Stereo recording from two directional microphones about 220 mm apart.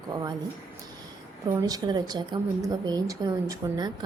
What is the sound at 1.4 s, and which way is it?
A woman's voice, 20° right (ahead or behind).